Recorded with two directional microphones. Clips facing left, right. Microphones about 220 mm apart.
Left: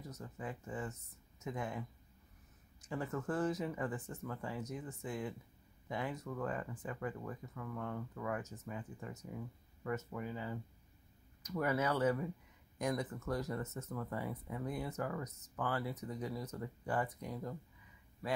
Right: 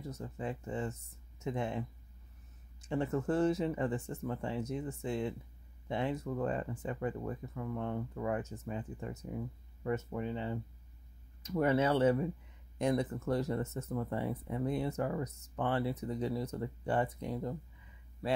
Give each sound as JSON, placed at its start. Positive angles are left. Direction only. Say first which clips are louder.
{"t": 0.0, "sound": "speech", "louder": "right 6 dB", "side_deg": -25}